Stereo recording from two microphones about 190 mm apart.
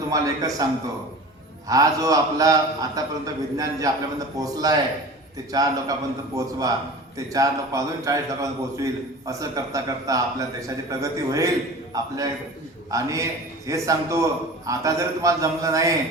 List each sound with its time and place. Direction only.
0.1 s a man's voice: 20° right (ahead or behind)